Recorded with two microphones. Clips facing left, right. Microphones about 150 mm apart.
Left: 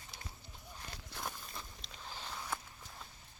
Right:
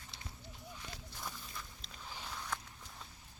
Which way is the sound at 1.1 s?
75° left (ahead or behind).